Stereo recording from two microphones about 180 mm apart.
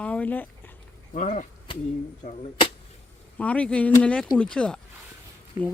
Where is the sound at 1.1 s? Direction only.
45° left (ahead or behind).